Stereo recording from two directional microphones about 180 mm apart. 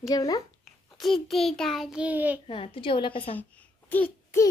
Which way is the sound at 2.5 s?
30° left (ahead or behind).